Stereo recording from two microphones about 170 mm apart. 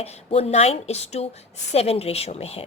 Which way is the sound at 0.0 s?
40° left (ahead or behind).